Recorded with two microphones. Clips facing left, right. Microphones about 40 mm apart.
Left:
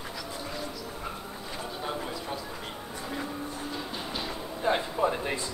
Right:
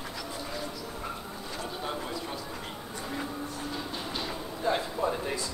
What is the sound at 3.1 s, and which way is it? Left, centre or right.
Music, centre.